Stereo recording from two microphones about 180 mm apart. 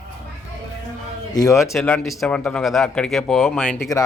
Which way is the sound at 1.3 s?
20° left (ahead or behind).